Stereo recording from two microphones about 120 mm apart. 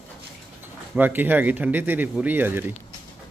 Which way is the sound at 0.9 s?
15° right (ahead or behind).